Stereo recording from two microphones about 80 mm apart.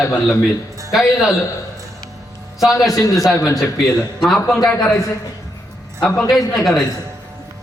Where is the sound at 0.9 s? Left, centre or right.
Centre.